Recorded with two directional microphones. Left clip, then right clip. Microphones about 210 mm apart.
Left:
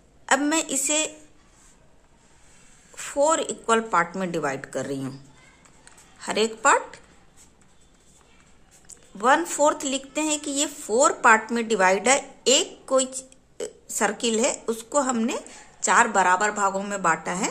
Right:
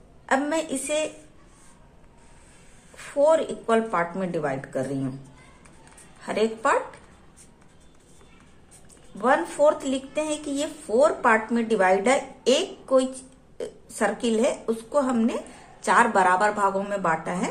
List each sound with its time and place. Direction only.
0.3 s a woman's voice: 30° left (ahead or behind)
3.0 s speech: 35° left (ahead or behind)
6.2 s speech: 35° left (ahead or behind)
8.8 s a woman's voice: 35° left (ahead or behind)